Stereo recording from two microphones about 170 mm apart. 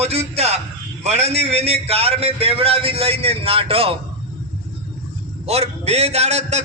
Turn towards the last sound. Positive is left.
turn(degrees=-40)  # may be behind; listen again after turning